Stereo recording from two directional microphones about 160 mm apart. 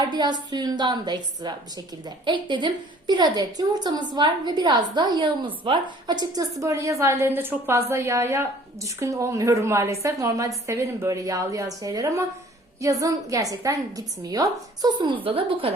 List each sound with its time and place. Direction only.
0.0 s a woman's voice: 25° right (ahead or behind)